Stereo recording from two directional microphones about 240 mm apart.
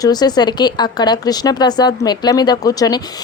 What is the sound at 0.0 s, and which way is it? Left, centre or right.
Speech, centre.